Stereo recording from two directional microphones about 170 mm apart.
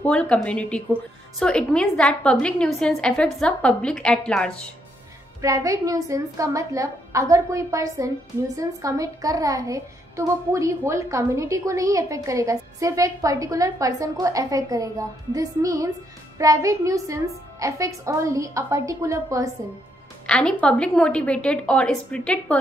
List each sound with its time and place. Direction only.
0.0 s a woman's voice: 5° left (ahead or behind)
5.4 s a child's voice: 20° right (ahead or behind)
20.2 s a woman's voice: 5° left (ahead or behind)